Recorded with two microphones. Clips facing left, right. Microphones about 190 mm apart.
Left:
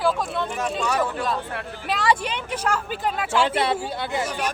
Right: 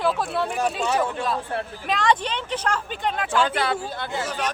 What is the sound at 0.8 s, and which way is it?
Speech, 25° right (ahead or behind).